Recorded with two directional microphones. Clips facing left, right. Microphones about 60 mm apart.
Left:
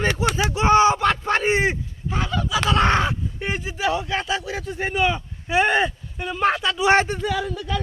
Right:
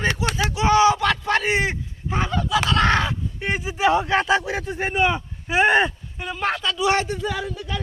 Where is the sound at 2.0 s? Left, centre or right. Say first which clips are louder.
Right 1 dB; right.